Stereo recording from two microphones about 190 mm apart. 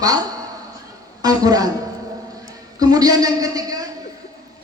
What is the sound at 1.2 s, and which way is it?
Speech, 20° right (ahead or behind).